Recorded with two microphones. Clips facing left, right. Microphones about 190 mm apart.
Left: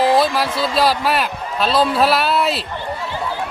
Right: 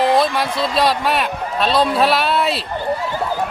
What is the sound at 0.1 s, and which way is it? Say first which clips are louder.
A man's voice: even; centre (ahead or behind).